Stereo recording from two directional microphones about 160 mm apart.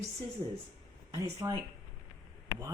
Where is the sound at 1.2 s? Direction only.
20° right (ahead or behind).